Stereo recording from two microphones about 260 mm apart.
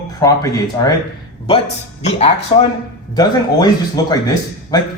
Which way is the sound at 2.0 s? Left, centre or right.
Left.